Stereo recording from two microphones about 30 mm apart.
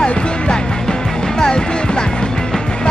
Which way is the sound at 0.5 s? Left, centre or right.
Left.